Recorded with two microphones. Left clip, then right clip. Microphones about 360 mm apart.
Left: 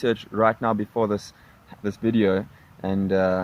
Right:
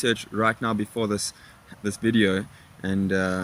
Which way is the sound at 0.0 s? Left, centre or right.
Centre.